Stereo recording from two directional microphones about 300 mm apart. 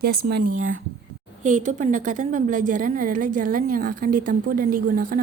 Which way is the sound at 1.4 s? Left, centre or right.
Right.